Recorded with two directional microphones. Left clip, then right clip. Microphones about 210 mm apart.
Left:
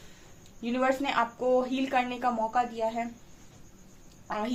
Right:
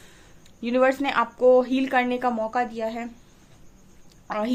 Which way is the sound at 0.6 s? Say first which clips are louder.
Right 7 dB; 50° right (ahead or behind).